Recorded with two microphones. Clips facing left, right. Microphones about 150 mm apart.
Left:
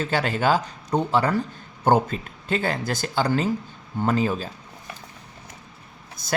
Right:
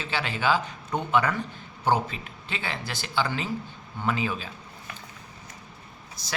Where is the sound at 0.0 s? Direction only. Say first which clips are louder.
Left 5 dB; 45° left (ahead or behind).